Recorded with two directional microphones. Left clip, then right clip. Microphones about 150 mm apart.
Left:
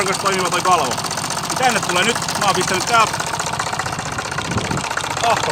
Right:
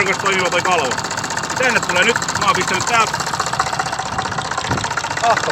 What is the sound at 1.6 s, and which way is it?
Speech, 25° left (ahead or behind).